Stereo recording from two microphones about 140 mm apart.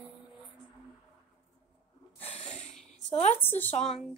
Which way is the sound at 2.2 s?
50° left (ahead or behind).